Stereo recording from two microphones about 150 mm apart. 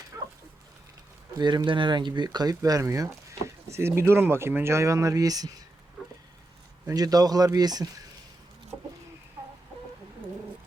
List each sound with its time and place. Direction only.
0.1 s a sound: 15° right (ahead or behind)
1.4 s speech: 30° right (ahead or behind)
6.8 s speech: 25° right (ahead or behind)